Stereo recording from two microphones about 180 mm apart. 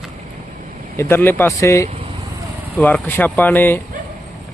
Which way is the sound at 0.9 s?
15° left (ahead or behind).